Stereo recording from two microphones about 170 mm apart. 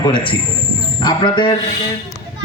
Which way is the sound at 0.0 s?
30° left (ahead or behind).